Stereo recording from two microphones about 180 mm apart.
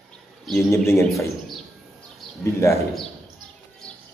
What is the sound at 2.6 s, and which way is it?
Speech, 15° left (ahead or behind).